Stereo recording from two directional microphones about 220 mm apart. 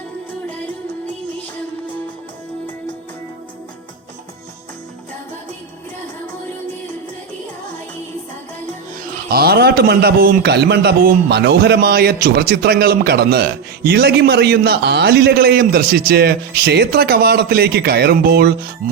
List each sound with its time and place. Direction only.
9.3 s a man's voice: 45° right (ahead or behind)